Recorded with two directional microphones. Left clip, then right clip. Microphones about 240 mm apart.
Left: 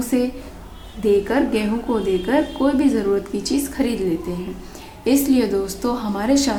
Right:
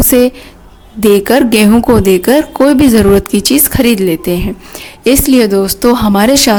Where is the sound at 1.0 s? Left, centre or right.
Right.